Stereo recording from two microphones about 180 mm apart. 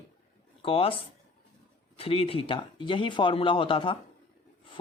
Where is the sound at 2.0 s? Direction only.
30° left (ahead or behind).